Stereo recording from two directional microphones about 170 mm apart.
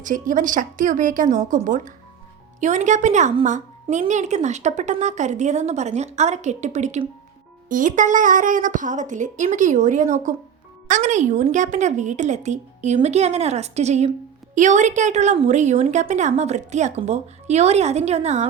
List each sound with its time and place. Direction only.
0.0 s a woman's voice: 50° right (ahead or behind)